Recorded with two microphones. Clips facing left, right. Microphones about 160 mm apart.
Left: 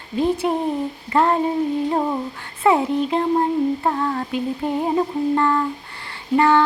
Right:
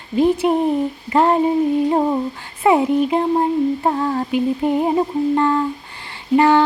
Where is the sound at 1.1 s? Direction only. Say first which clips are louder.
Right 3 dB; 20° right (ahead or behind).